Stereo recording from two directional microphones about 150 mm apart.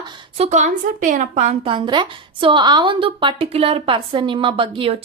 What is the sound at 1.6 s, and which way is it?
A woman's voice, 30° right (ahead or behind).